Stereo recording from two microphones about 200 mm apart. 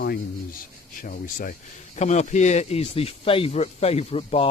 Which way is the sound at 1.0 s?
45° left (ahead or behind).